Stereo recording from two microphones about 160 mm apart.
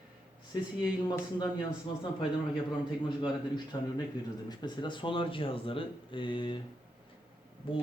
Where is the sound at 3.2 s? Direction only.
30° left (ahead or behind).